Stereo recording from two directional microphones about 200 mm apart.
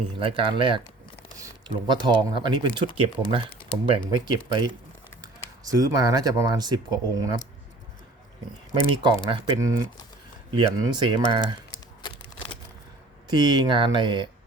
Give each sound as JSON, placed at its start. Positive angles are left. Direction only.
{"t": 0.2, "sound": "speech", "side_deg": -25}
{"t": 8.7, "sound": "speech", "side_deg": -25}
{"t": 12.0, "sound": "a sound", "side_deg": 25}
{"t": 13.2, "sound": "speech", "side_deg": -20}